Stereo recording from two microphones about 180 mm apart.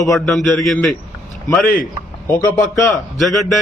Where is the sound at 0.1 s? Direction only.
Centre (ahead or behind).